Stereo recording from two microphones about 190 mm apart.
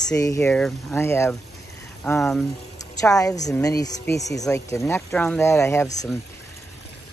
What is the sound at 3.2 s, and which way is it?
A woman's voice, 20° left (ahead or behind).